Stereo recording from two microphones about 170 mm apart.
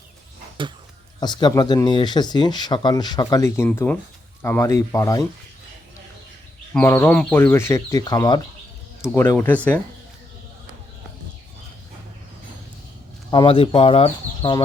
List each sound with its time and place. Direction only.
1.2 s speech: 25° left (ahead or behind)
6.7 s speech: 15° left (ahead or behind)
13.3 s speech: 30° left (ahead or behind)